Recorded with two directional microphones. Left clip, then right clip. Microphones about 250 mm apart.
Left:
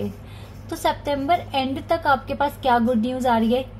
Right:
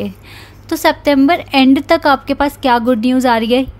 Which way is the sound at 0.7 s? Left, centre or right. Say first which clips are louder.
Right 10 dB; right.